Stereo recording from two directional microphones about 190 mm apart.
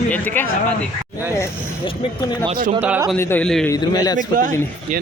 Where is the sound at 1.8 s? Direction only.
25° left (ahead or behind).